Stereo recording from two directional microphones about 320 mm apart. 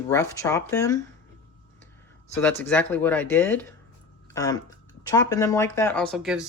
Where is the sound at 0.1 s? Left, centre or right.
Centre.